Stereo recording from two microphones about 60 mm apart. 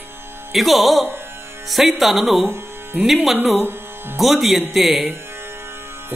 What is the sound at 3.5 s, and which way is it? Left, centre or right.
Music, right.